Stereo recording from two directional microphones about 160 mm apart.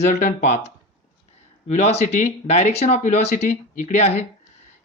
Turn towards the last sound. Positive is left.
turn(degrees=50)  # may be behind; listen again after turning